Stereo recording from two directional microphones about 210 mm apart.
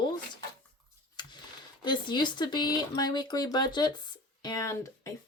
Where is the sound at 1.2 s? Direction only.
20° left (ahead or behind).